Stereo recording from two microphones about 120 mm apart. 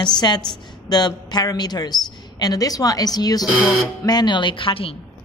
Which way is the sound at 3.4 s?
10° right (ahead or behind).